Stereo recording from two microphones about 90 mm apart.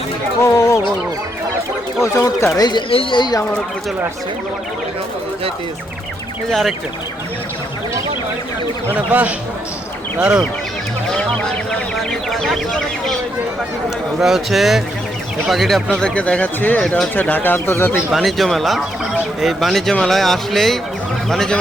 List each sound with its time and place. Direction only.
0.5 s chicken: 40° left (ahead or behind)
2.0 s speech: 35° left (ahead or behind)
2.9 s speech: 90° left
3.2 s speech: 50° left (ahead or behind)
6.5 s speech: centre (ahead or behind)
8.9 s speech: 15° right (ahead or behind)
11.1 s speech: 10° left (ahead or behind)
14.2 s speech: centre (ahead or behind)
16.0 s speech: 15° left (ahead or behind)
18.1 s speech: centre (ahead or behind)